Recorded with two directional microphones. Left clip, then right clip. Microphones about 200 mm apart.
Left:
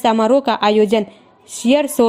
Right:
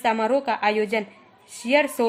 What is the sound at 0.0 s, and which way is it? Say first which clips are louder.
A woman's voice: left 8 dB; 35° left (ahead or behind).